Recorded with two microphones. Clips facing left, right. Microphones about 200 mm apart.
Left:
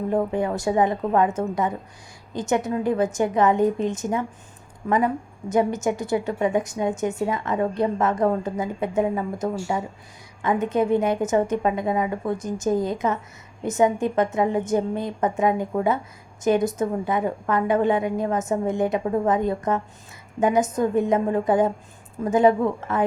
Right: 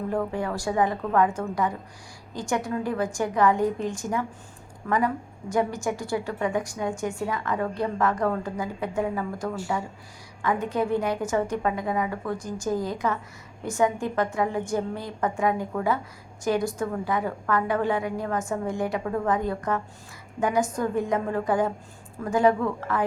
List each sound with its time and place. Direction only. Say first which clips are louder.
0.1 s a woman's voice: left 6 dB; 20° left (ahead or behind)